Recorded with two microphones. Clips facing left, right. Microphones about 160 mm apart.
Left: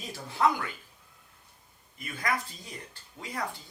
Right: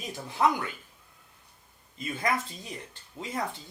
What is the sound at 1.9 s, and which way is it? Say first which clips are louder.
Speech: right 3 dB; 25° right (ahead or behind).